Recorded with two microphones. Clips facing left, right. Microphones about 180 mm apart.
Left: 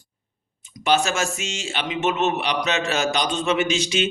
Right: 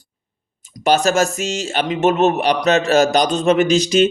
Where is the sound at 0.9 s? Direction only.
40° right (ahead or behind).